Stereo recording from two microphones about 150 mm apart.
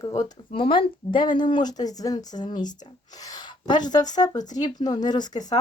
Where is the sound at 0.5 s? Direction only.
35° left (ahead or behind).